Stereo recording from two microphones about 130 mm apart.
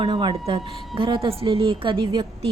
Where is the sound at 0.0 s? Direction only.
40° right (ahead or behind).